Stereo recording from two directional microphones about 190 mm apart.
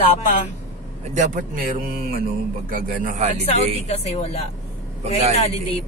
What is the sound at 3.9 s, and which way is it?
Speech, 35° left (ahead or behind).